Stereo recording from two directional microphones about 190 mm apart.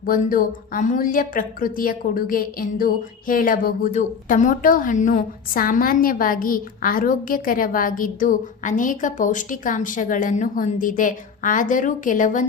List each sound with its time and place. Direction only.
0.0 s speech: 45° left (ahead or behind)